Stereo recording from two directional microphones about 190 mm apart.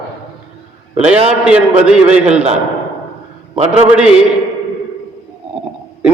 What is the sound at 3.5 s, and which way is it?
Speech, 35° right (ahead or behind).